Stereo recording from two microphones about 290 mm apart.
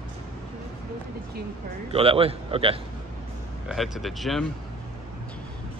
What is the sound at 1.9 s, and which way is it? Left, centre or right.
Speech, centre.